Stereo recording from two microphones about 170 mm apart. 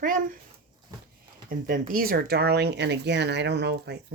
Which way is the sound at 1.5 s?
55° right (ahead or behind).